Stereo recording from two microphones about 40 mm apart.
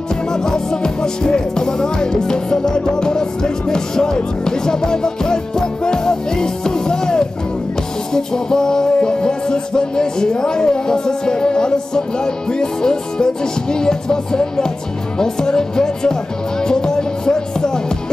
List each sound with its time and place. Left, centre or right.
0.3 s music: centre
15.1 s speech: centre
16.6 s music: centre